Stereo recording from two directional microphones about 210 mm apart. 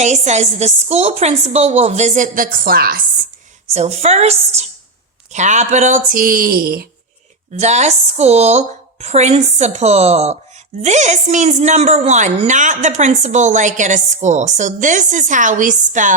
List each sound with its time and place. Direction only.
0.0 s a woman's voice: 35° right (ahead or behind)
3.8 s a woman's voice: 30° right (ahead or behind)
7.6 s a woman's voice: 35° right (ahead or behind)